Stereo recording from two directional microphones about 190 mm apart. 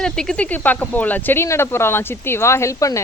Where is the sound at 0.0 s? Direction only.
5° left (ahead or behind).